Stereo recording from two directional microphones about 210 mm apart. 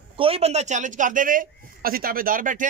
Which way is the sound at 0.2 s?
30° right (ahead or behind).